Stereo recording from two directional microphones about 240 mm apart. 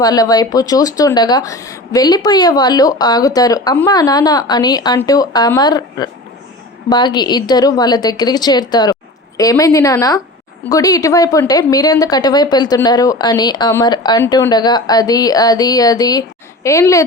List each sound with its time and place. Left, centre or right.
0.0 s speech: centre